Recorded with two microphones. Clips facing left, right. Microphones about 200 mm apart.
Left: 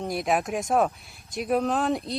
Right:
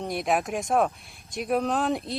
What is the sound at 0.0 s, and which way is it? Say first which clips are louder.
Speech: left 1 dB; centre (ahead or behind).